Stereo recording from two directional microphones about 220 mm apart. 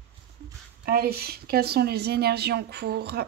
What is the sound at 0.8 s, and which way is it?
Speech, 45° right (ahead or behind).